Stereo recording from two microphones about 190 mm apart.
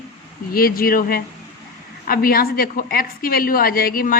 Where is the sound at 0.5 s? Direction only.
50° left (ahead or behind).